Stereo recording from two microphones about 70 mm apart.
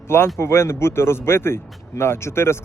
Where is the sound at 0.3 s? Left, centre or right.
Left.